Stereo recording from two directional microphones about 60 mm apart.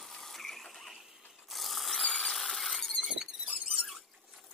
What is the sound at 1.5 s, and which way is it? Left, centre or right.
Squeal, centre.